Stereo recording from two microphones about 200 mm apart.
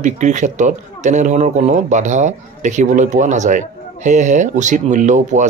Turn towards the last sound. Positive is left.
turn(degrees=-40)  # may be behind; listen again after turning